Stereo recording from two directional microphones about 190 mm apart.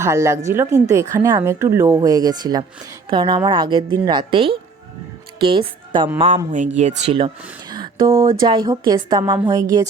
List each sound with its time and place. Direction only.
0.0 s a woman's voice: 15° right (ahead or behind); by 7.3 s 30° right (ahead or behind)
7.7 s a sound: 25° right (ahead or behind)
8.4 s a woman's voice: 20° right (ahead or behind)